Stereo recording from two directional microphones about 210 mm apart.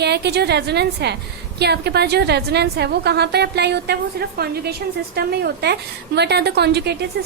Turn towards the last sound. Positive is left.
turn(degrees=-55)  # may be behind; listen again after turning